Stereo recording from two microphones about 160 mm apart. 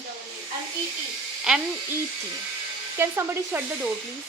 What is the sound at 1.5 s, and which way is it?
Speech, centre (ahead or behind).